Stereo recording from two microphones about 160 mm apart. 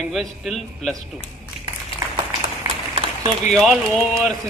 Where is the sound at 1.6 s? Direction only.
30° right (ahead or behind).